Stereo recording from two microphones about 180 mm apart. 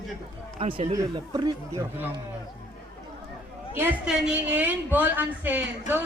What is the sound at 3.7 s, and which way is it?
A woman's voice, 5° right (ahead or behind).